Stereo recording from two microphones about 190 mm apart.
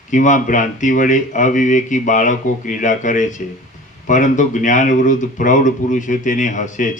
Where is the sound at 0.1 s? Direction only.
40° left (ahead or behind).